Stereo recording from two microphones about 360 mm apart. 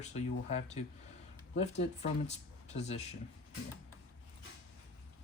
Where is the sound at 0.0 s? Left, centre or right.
Centre.